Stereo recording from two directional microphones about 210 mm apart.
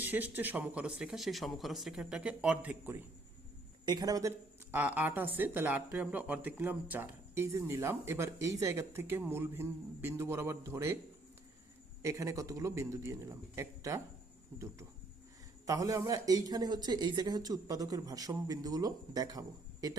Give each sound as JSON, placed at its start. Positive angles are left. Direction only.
{"t": 0.0, "sound": "speech", "side_deg": -10}
{"t": 12.0, "sound": "speech", "side_deg": -15}